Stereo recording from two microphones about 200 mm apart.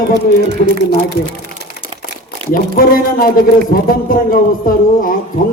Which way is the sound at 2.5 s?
45° left (ahead or behind).